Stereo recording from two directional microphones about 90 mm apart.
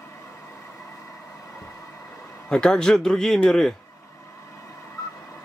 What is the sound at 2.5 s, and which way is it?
Speech, 10° left (ahead or behind).